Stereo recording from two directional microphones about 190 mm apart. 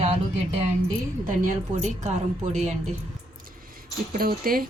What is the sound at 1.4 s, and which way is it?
Speech, 40° right (ahead or behind).